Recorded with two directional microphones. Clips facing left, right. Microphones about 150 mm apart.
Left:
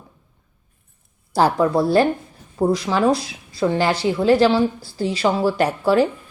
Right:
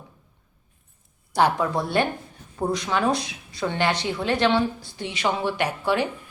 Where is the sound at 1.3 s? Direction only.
35° left (ahead or behind).